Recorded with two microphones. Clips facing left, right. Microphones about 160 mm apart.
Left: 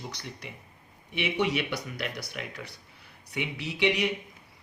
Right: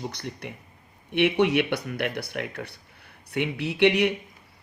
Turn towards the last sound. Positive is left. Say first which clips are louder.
# right 6 dB
turn(degrees=-60)  # may be behind; listen again after turning